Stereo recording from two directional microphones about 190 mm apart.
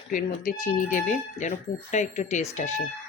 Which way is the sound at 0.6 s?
40° left (ahead or behind).